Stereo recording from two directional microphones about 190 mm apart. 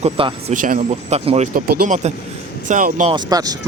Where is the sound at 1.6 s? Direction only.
50° right (ahead or behind).